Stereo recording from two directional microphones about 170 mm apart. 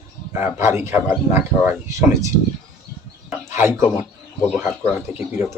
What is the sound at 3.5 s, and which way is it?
A man's voice, 15° right (ahead or behind).